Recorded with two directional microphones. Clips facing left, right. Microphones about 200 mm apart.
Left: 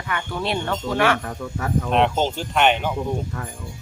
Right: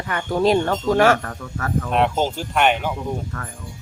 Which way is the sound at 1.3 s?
10° left (ahead or behind).